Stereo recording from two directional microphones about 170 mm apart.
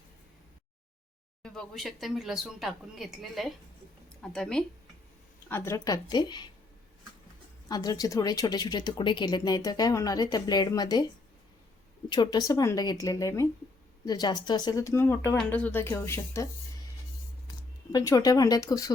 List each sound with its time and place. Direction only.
1.4 s speech: 5° left (ahead or behind)
5.5 s speech: 15° left (ahead or behind)
7.7 s speech: 20° left (ahead or behind)
12.0 s speech: 25° left (ahead or behind)
17.9 s speech: 20° left (ahead or behind)